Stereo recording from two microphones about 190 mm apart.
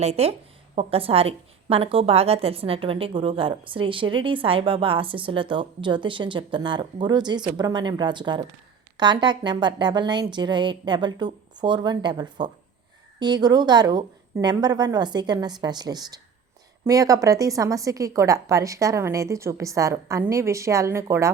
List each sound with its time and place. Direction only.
0.0 s a woman's voice: 35° right (ahead or behind); by 21.3 s 15° right (ahead or behind)